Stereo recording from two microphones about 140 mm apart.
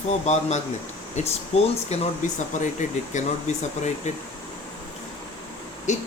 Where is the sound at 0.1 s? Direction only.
55° left (ahead or behind).